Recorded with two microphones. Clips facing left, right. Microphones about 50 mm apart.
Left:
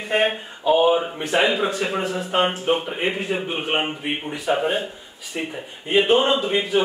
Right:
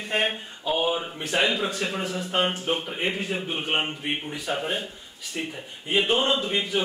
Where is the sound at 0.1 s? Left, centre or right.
Centre.